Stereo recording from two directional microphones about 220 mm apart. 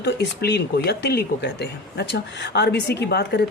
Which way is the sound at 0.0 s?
50° left (ahead or behind).